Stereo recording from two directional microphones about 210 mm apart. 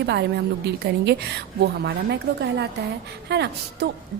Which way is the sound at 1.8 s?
55° right (ahead or behind).